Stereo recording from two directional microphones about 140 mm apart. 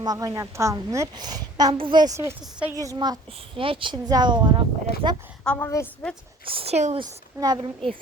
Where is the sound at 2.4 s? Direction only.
10° right (ahead or behind).